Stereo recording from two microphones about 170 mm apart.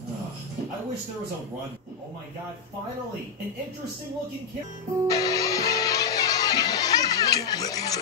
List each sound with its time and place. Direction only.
5.0 s music: 20° left (ahead or behind)